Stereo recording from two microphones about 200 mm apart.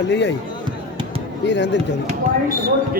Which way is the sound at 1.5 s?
60° left (ahead or behind).